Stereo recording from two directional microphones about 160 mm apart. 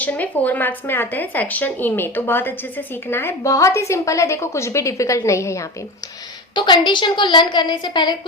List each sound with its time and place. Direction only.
0.0 s speech: 10° left (ahead or behind)
6.5 s a woman's voice: 30° left (ahead or behind)